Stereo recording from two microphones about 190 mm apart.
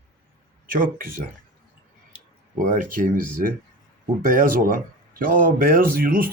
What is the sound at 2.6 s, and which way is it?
Speech, 45° right (ahead or behind).